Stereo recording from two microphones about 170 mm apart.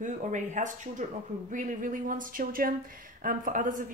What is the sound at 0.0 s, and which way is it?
Speech, 45° right (ahead or behind).